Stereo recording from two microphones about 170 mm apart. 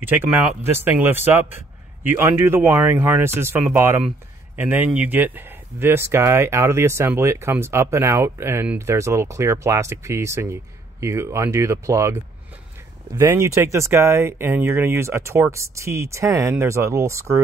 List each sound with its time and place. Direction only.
0.0 s speech: 10° right (ahead or behind)